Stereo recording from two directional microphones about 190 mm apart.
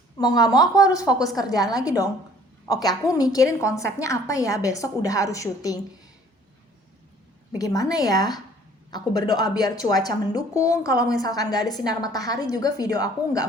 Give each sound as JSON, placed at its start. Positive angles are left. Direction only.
{"t": 0.2, "sound": "a woman's voice", "side_deg": 20}
{"t": 7.6, "sound": "a woman's voice", "side_deg": 20}